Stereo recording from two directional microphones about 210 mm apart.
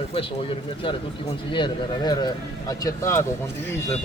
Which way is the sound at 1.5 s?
20° left (ahead or behind).